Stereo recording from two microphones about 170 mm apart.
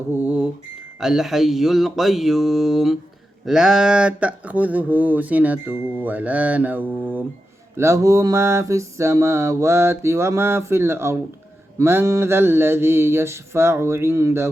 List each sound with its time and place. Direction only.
0.1 s speech: 10° right (ahead or behind)